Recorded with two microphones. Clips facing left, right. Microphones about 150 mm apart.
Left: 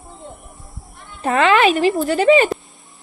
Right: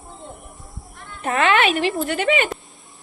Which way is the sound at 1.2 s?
30° left (ahead or behind).